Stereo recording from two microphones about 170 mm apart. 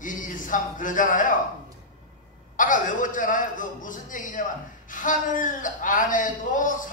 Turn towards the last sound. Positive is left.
turn(degrees=50)  # may be behind; listen again after turning